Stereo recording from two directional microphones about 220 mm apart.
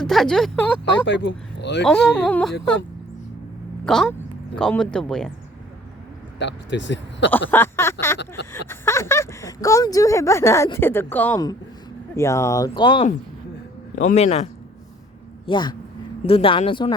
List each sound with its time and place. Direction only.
0.0 s speech: centre (ahead or behind)
0.9 s speech: 55° left (ahead or behind)
1.8 s speech: 5° left (ahead or behind)
3.8 s speech: centre (ahead or behind)
6.4 s speech: 55° left (ahead or behind)
7.5 s speech: 10° left (ahead or behind)
8.4 s speech: 50° left (ahead or behind)
8.7 s speech: 10° left (ahead or behind)
14.1 s speech: 30° left (ahead or behind)